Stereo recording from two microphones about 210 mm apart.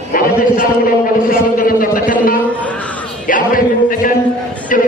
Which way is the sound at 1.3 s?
40° left (ahead or behind).